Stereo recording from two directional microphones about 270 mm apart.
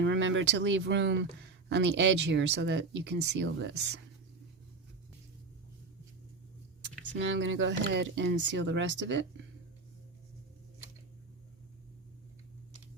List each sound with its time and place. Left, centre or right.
0.0 s speech: right
7.1 s speech: right